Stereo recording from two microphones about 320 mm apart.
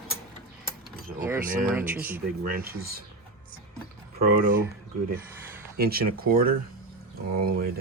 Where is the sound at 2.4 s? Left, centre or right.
Right.